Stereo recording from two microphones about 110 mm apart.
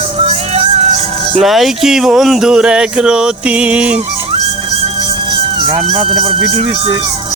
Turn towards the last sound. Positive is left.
turn(degrees=-60)  # may be behind; listen again after turning